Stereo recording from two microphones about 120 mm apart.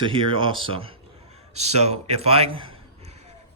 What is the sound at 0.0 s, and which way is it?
A man's voice, 45° right (ahead or behind).